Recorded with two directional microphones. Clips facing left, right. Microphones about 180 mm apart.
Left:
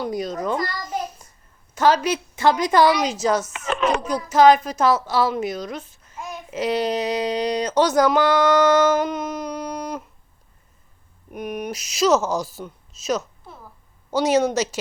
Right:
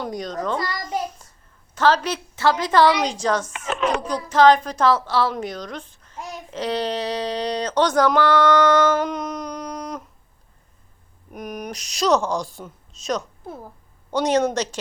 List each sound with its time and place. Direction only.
0.0 s a woman's voice: 5° left (ahead or behind)
1.7 s speech: 10° left (ahead or behind)
3.6 s a sound: 10° right (ahead or behind)
4.0 s speech: 10° left (ahead or behind)
11.3 s a woman's voice: centre (ahead or behind)
13.4 s a sound: 50° right (ahead or behind)
14.1 s a woman's voice: 5° left (ahead or behind)